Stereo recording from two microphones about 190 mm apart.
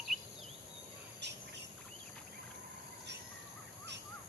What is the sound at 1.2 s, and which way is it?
Bird, 65° right (ahead or behind).